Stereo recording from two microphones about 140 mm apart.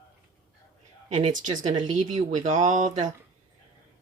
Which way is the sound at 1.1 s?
55° right (ahead or behind).